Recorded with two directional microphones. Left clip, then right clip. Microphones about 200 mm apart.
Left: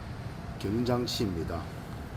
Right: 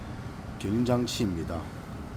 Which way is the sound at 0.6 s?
20° right (ahead or behind).